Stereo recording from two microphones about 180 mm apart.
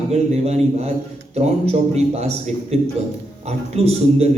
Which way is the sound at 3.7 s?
35° right (ahead or behind).